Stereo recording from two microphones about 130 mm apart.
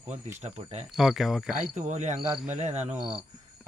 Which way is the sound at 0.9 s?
5° right (ahead or behind).